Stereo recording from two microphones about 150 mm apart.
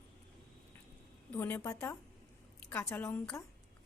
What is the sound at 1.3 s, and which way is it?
A woman's voice, 10° left (ahead or behind).